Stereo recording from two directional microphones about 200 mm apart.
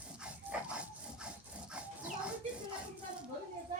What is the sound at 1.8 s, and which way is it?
Dog, 5° right (ahead or behind).